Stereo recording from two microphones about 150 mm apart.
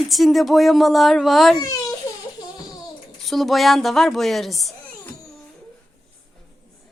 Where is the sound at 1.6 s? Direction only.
25° left (ahead or behind).